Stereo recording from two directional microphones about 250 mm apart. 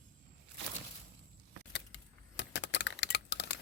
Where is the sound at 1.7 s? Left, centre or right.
Left.